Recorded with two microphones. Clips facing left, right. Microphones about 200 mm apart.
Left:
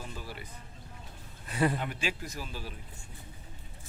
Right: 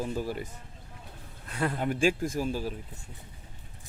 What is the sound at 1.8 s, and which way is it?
Speech, 45° right (ahead or behind).